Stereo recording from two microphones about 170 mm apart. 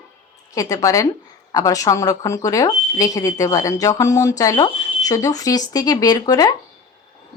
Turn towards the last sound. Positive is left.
turn(degrees=25)  # may be behind; listen again after turning